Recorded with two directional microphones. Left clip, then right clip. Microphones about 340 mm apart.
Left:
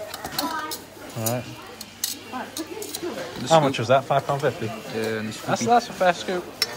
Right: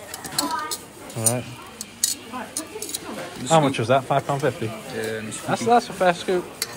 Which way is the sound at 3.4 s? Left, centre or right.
Centre.